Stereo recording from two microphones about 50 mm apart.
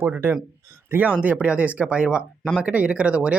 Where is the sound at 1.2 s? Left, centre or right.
Right.